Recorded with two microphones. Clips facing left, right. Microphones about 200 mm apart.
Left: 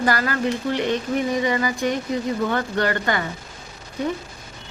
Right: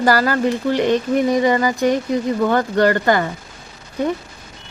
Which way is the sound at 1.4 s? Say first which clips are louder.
Right 6 dB; 40° right (ahead or behind).